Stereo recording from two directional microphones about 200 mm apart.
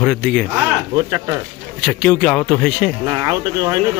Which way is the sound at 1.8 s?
Centre (ahead or behind).